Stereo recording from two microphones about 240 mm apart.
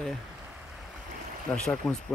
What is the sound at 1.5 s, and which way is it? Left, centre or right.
Speech, centre.